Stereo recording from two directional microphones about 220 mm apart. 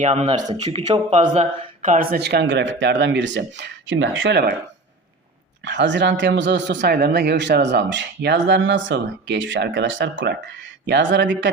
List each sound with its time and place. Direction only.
0.0 s speech: 30° right (ahead or behind); by 4.5 s 45° right (ahead or behind)
5.6 s speech: 55° right (ahead or behind)